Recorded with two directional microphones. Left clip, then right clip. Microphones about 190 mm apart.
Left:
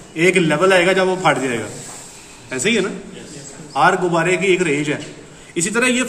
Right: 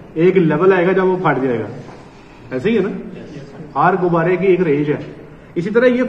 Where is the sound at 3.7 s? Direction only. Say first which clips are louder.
Even; 30° left (ahead or behind).